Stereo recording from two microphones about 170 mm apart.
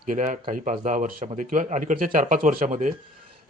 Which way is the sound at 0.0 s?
50° right (ahead or behind).